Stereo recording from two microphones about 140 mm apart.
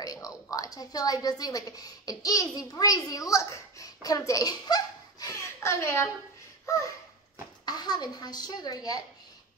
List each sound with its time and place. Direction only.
0.0 s a woman's voice: 25° left (ahead or behind)
6.6 s a sound: 20° left (ahead or behind)
7.6 s a child's voice: 30° left (ahead or behind)